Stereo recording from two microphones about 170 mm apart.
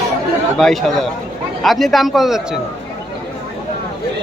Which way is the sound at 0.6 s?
Centre (ahead or behind).